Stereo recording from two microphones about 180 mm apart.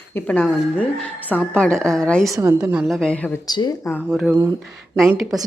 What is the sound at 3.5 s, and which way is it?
Speech, 20° left (ahead or behind).